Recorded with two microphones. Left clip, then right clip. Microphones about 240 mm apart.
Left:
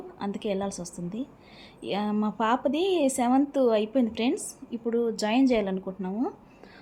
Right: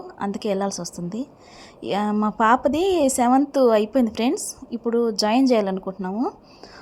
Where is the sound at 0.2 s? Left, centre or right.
Centre.